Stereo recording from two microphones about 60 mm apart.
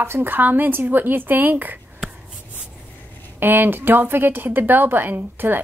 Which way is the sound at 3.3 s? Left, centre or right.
Right.